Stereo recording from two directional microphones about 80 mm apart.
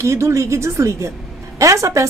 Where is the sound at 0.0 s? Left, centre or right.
Right.